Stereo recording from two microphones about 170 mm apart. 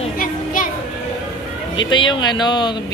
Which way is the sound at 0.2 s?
55° left (ahead or behind).